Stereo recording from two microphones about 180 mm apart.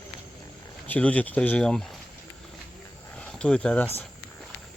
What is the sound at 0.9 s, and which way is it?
Speech, 10° left (ahead or behind).